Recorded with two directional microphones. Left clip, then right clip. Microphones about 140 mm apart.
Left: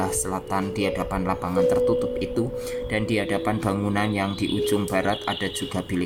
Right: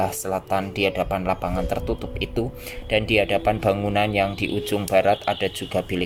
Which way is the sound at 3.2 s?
40° right (ahead or behind).